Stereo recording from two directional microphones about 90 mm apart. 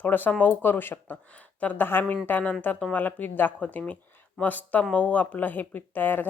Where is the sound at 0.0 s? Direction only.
20° left (ahead or behind).